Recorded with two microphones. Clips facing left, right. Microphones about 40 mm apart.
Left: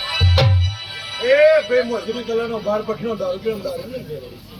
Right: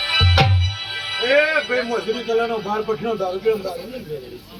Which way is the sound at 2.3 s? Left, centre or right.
Right.